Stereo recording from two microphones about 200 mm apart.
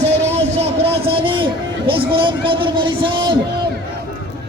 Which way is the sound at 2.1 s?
25° right (ahead or behind).